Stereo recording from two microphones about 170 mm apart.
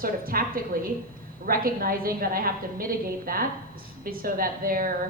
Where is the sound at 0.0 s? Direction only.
60° right (ahead or behind).